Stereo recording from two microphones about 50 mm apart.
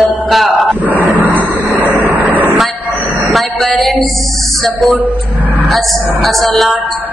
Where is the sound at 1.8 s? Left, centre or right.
Right.